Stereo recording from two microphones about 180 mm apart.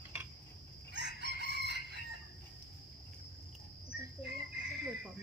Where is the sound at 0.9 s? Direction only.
75° right (ahead or behind).